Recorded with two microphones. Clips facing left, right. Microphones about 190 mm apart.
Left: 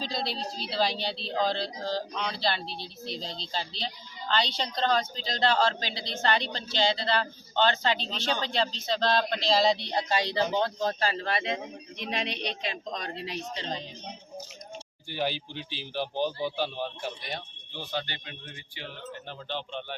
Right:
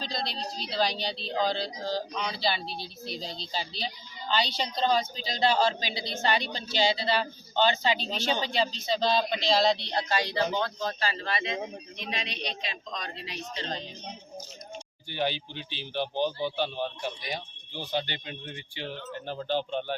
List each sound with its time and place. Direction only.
0.0 s a woman's voice: 5° left (ahead or behind)
9.9 s a man's voice: 20° left (ahead or behind); by 13.4 s 50° left (ahead or behind)
13.6 s speech: 15° left (ahead or behind)
15.1 s speech: 5° left (ahead or behind)
17.7 s speech: 15° right (ahead or behind); by 20.0 s 40° right (ahead or behind)